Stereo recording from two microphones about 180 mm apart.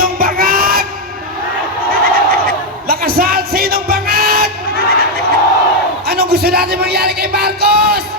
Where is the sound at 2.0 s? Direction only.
55° right (ahead or behind).